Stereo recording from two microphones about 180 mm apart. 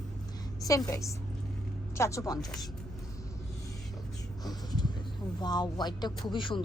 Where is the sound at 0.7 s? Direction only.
20° left (ahead or behind).